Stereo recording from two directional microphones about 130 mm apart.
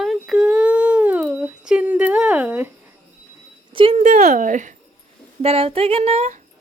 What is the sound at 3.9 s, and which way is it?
Speech, 60° right (ahead or behind).